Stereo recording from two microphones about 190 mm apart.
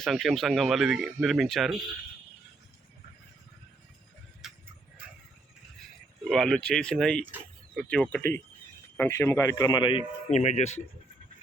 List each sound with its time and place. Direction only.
0.0 s speech: centre (ahead or behind)
4.4 s tick-tock: centre (ahead or behind)
6.2 s a man's voice: 5° left (ahead or behind); by 10.8 s 35° left (ahead or behind)